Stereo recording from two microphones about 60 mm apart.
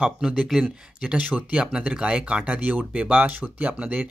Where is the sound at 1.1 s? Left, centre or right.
Right.